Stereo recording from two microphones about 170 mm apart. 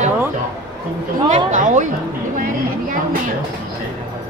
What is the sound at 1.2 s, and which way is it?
Speech, 45° right (ahead or behind).